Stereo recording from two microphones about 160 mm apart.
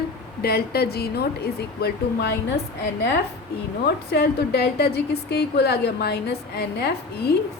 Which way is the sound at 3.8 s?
85° left.